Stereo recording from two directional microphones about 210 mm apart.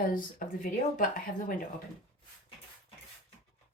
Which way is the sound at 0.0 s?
40° left (ahead or behind).